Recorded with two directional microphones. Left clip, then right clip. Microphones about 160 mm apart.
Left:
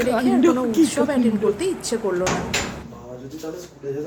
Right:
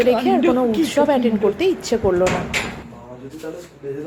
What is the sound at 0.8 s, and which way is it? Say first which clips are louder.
Speech: right 3 dB; 15° right (ahead or behind).